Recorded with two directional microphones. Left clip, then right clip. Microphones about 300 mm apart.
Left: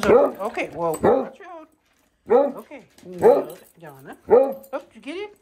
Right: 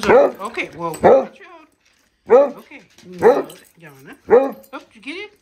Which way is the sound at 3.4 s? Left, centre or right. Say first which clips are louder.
Left 1 dB; centre.